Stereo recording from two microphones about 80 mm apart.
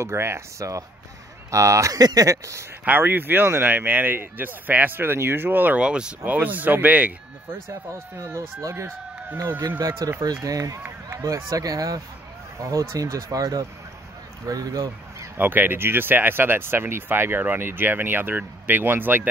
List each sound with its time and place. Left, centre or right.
0.0 s speech: right
2.8 s speech: right
7.9 s speech: right
9.8 s speech: right
15.3 s speech: right